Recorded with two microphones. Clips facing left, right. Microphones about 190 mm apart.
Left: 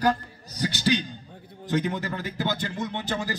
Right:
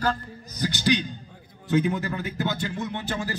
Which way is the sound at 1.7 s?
Centre (ahead or behind).